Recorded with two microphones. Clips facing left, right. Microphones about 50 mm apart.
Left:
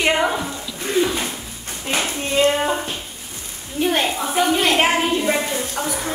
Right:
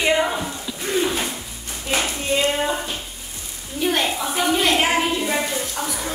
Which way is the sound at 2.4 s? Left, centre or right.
Left.